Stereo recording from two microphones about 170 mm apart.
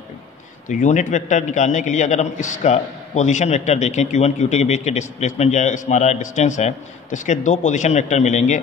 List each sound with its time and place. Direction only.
0.7 s a man's voice: 50° left (ahead or behind)